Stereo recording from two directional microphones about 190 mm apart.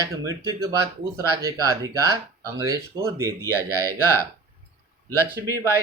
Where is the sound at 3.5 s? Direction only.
15° left (ahead or behind).